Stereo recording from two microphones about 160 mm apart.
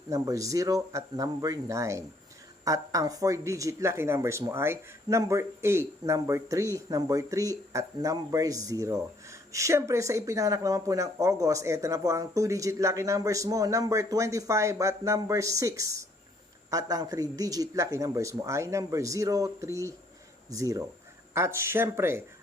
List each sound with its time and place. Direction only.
0.1 s speech: 20° right (ahead or behind)